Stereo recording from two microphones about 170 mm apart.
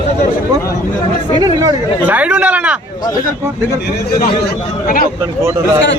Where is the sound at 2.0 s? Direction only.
10° right (ahead or behind).